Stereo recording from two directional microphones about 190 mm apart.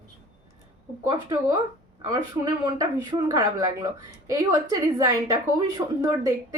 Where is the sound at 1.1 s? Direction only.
20° right (ahead or behind).